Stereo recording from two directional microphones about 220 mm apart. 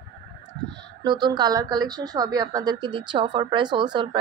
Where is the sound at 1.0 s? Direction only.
20° right (ahead or behind).